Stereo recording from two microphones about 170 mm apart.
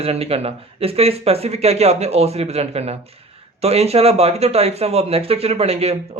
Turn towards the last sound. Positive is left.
turn(degrees=-35)  # may be behind; listen again after turning